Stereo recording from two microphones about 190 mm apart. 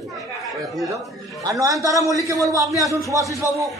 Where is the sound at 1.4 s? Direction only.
15° right (ahead or behind).